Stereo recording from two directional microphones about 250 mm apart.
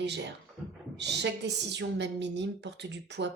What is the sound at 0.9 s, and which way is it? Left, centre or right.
Speech, right.